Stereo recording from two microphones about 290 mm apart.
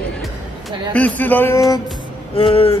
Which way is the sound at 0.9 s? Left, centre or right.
Centre.